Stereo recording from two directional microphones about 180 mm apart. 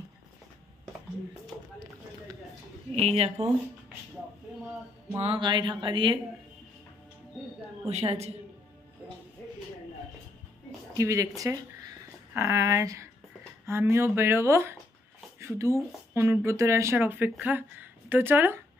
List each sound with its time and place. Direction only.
2.9 s speech: 35° right (ahead or behind)
5.1 s speech: 25° right (ahead or behind)
7.9 s speech: 35° right (ahead or behind)
11.0 s speech: 15° right (ahead or behind)